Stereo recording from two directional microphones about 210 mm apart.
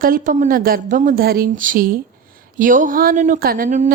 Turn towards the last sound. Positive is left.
turn(degrees=-40)  # may be behind; listen again after turning